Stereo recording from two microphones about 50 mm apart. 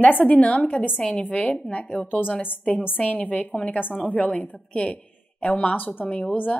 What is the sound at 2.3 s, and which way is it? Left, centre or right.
A woman's voice, left.